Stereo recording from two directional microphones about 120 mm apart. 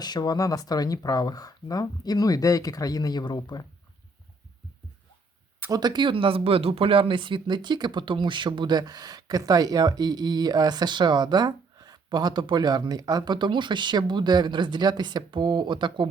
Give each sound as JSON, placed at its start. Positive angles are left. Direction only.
{"t": 0.0, "sound": "speech", "side_deg": 35}
{"t": 5.7, "sound": "speech", "side_deg": -40}